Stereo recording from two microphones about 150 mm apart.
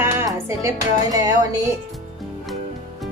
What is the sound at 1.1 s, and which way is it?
Speech, 25° right (ahead or behind).